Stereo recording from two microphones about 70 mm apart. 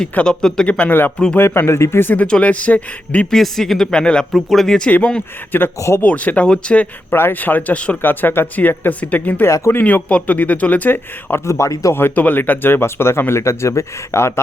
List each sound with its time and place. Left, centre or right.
0.1 s speech: centre
1.4 s speech: left
2.2 s speech: centre
3.2 s speech: centre
4.3 s speech: centre
4.9 s speech: left
7.1 s speech: left
9.5 s speech: left
9.8 s speech: centre
11.4 s speech: left
11.9 s speech: left